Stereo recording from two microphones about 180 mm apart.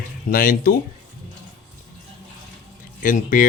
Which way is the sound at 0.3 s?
55° left (ahead or behind).